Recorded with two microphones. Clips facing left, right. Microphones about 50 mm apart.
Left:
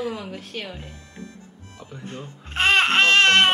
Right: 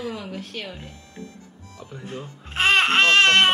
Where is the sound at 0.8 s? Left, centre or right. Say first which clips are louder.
Even; left.